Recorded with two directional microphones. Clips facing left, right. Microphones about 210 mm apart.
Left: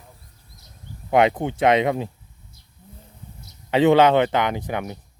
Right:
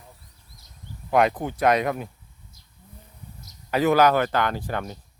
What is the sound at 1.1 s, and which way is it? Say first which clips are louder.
Speech: left 3 dB; 25° left (ahead or behind).